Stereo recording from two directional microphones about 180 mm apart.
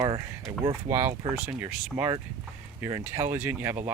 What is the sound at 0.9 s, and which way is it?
Speech, 15° right (ahead or behind).